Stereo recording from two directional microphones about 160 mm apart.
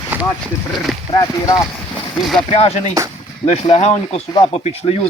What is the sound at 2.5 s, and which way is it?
Speech, 40° left (ahead or behind).